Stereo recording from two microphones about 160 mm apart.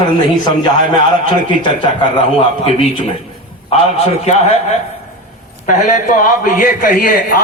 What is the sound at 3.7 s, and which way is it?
Speech, 40° left (ahead or behind).